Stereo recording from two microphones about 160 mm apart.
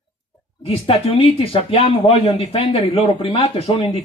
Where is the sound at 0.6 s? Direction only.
35° left (ahead or behind).